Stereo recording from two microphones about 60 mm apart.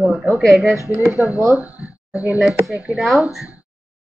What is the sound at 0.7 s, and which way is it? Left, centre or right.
Speech, right.